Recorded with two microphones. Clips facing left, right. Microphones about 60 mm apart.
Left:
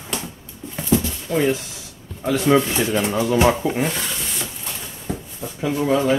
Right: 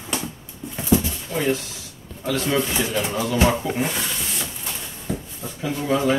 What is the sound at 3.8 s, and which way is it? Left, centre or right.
Rub, centre.